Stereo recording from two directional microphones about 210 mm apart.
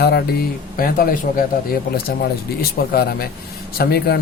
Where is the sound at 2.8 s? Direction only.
45° left (ahead or behind).